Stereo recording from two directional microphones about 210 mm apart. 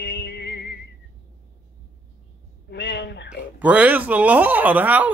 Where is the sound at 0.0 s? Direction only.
55° left (ahead or behind).